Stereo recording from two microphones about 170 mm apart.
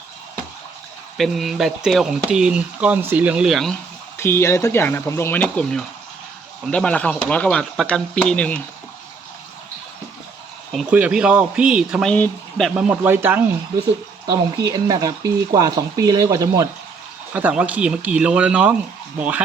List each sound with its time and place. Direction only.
1.1 s speech: centre (ahead or behind)
4.2 s speech: 15° left (ahead or behind)
10.7 s speech: 5° right (ahead or behind)
14.7 s speech: 20° right (ahead or behind)
17.3 s speech: 5° right (ahead or behind)